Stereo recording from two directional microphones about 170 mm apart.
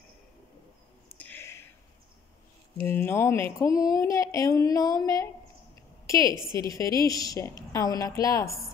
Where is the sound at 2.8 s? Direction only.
10° left (ahead or behind).